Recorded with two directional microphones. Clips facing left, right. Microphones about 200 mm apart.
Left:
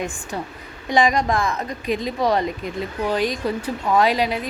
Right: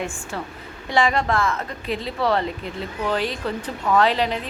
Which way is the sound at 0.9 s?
15° left (ahead or behind).